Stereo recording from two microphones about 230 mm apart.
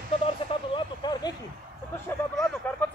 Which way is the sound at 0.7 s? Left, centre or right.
Centre.